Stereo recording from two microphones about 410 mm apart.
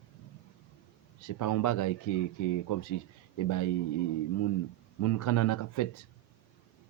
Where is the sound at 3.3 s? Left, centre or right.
Left.